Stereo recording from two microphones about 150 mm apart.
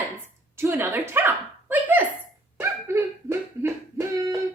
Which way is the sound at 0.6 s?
15° right (ahead or behind).